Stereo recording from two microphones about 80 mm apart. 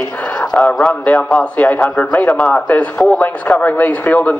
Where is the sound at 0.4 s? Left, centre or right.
Centre.